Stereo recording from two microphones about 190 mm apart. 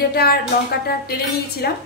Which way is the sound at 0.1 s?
55° left (ahead or behind).